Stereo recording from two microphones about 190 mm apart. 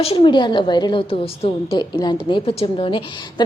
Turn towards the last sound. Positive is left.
turn(degrees=25)  # may be behind; listen again after turning